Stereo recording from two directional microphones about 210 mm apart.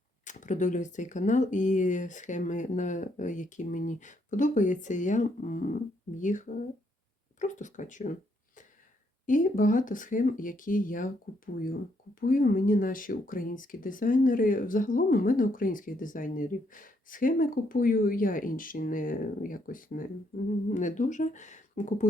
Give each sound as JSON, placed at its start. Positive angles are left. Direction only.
{"t": 0.3, "sound": "speech", "side_deg": 35}
{"t": 9.2, "sound": "speech", "side_deg": 40}